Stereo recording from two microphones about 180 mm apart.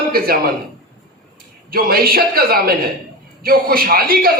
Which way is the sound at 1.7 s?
55° right (ahead or behind).